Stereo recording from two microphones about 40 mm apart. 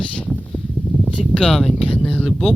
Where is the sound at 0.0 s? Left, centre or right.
Left.